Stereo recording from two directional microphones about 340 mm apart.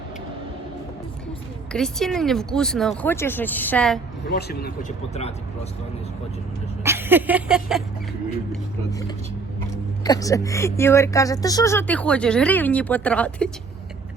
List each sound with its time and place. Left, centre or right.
1.7 s speech: centre
4.3 s speech: left
6.8 s a sound: centre
8.9 s speech: centre